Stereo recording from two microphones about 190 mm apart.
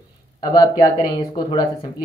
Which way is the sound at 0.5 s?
20° left (ahead or behind).